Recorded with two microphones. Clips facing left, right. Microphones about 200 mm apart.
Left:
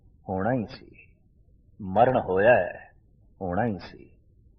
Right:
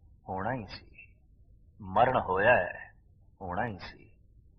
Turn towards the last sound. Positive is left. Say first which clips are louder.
# left 9 dB
turn(degrees=45)  # may be behind; listen again after turning